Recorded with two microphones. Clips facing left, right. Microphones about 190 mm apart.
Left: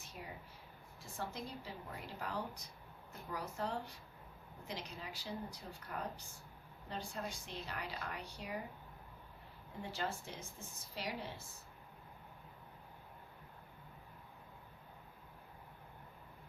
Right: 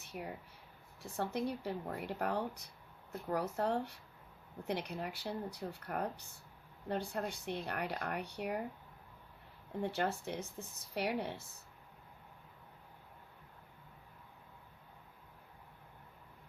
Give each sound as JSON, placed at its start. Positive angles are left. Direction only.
{"t": 0.0, "sound": "speech", "side_deg": -60}
{"t": 9.8, "sound": "speech", "side_deg": -60}